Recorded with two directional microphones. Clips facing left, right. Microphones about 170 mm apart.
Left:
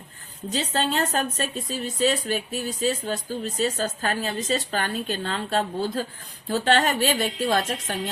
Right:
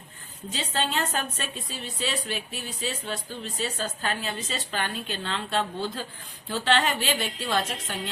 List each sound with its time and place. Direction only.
0.5 s a woman's voice: 40° left (ahead or behind)